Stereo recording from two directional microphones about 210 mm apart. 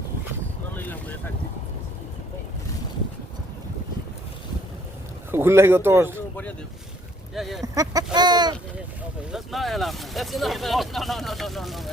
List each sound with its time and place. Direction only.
0.8 s boat: 10° left (ahead or behind)
5.3 s speech: 10° right (ahead or behind)
7.3 s speech: centre (ahead or behind)
7.6 s speech: 15° right (ahead or behind)
9.3 s speech: centre (ahead or behind)